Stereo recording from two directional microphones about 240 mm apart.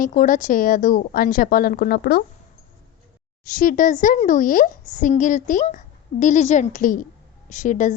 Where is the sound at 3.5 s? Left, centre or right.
Left.